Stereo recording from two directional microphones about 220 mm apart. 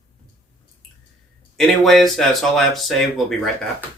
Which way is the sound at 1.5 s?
Centre (ahead or behind).